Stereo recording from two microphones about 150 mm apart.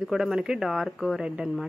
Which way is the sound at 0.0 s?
5° right (ahead or behind).